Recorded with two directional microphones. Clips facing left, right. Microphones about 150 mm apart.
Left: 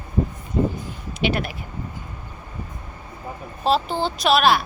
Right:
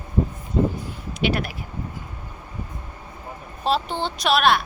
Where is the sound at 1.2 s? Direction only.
Centre (ahead or behind).